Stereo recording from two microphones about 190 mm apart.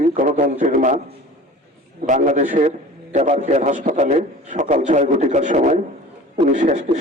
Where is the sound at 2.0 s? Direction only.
40° right (ahead or behind).